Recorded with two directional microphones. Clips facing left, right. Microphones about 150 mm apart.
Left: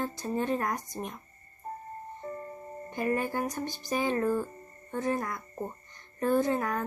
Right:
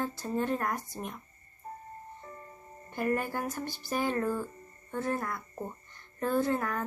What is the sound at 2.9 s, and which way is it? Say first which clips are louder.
A woman's voice: left 1 dB; 20° left (ahead or behind).